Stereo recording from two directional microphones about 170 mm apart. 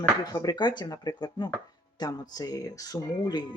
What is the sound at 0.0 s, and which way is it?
Speech, 20° left (ahead or behind).